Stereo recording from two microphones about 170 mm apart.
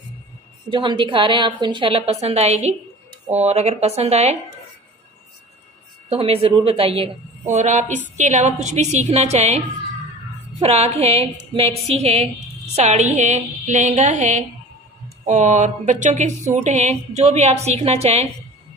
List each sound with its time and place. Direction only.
0.7 s a woman's voice: 30° right (ahead or behind)
6.1 s a woman's voice: 35° right (ahead or behind)
10.6 s a woman's voice: 40° right (ahead or behind)